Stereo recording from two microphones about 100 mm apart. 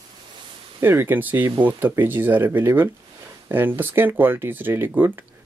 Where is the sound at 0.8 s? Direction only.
25° right (ahead or behind).